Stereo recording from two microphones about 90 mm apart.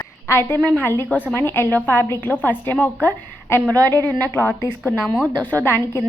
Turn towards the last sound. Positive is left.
turn(degrees=25)  # may be behind; listen again after turning